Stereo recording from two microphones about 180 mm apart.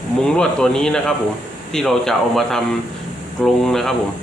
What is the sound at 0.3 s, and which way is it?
Speech, 5° left (ahead or behind).